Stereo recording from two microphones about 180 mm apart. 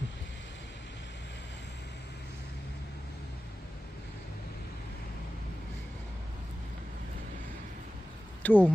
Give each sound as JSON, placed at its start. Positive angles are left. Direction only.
{"t": 8.4, "sound": "speech", "side_deg": 10}